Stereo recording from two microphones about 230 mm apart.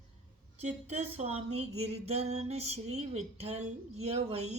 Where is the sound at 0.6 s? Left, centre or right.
Right.